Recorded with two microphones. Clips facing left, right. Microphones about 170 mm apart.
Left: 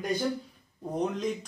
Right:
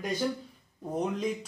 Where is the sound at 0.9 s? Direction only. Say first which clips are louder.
Left 1 dB; 5° right (ahead or behind).